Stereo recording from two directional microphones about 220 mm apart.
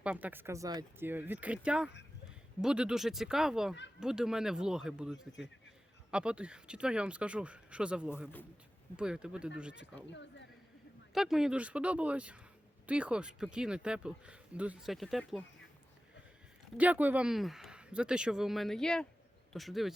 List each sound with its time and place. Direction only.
0.0 s speech: 5° right (ahead or behind)
9.7 s speech: 55° left (ahead or behind)
11.1 s speech: centre (ahead or behind)
16.7 s speech: 5° right (ahead or behind)